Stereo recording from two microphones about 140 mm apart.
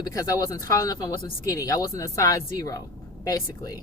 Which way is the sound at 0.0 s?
25° left (ahead or behind).